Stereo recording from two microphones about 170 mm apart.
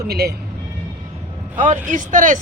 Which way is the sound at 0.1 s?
75° right (ahead or behind).